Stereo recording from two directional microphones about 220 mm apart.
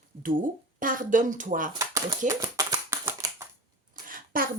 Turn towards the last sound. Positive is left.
turn(degrees=-40)  # may be behind; listen again after turning